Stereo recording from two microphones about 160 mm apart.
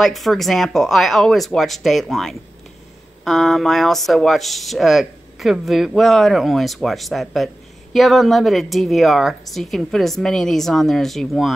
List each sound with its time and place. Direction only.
0.0 s speech: centre (ahead or behind)